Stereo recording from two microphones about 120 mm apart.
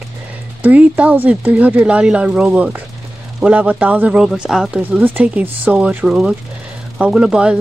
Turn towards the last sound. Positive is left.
turn(degrees=-10)  # may be behind; listen again after turning